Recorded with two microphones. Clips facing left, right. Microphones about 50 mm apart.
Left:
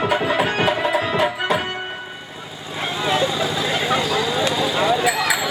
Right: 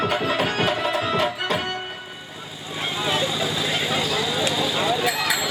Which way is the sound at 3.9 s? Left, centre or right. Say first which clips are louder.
Left 4 dB; centre.